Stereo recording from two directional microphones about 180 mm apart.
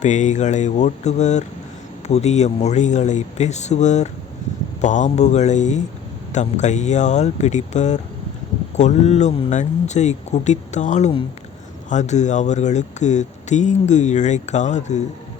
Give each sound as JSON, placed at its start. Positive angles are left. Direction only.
{"t": 0.0, "sound": "speech", "side_deg": 40}